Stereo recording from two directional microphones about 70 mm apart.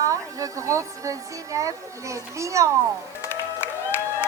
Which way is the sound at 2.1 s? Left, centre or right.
Right.